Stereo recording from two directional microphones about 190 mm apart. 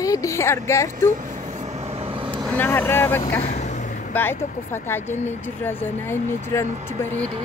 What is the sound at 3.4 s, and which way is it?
Vehicle, 35° left (ahead or behind).